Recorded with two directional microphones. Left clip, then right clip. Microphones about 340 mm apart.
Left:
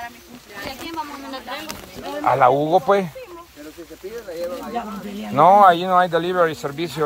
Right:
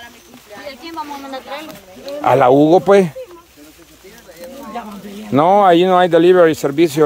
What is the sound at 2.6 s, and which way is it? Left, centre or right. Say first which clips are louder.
Speech: right 7 dB; right.